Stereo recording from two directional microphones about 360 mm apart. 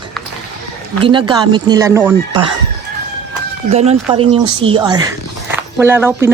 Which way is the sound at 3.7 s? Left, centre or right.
Centre.